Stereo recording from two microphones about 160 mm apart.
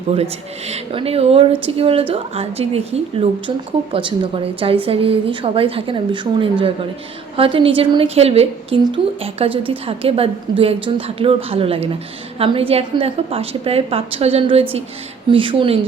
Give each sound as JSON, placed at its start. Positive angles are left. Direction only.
{"t": 0.7, "sound": "a woman's voice", "side_deg": -40}